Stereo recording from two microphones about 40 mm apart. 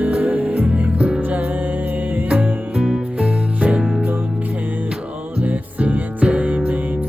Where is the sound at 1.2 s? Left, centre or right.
Right.